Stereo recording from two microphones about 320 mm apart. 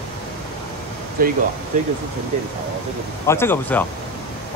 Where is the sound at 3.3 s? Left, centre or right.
Centre.